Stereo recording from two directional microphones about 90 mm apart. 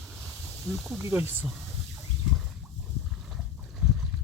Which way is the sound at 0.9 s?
25° right (ahead or behind).